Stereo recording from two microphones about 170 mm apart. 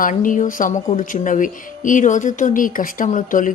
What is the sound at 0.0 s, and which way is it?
Speech, 50° left (ahead or behind).